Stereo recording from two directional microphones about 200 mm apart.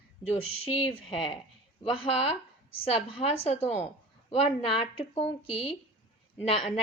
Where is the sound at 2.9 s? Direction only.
25° left (ahead or behind).